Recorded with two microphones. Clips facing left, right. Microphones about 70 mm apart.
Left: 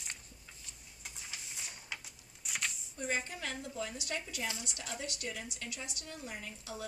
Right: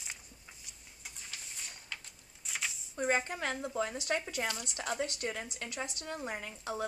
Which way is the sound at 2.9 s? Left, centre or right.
Right.